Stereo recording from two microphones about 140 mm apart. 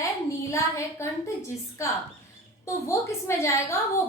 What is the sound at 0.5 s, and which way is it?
A woman's voice, 20° left (ahead or behind).